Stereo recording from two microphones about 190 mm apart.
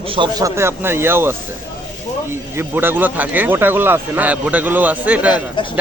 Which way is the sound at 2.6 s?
10° right (ahead or behind).